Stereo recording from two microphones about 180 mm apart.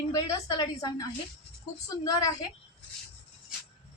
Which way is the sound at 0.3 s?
20° left (ahead or behind).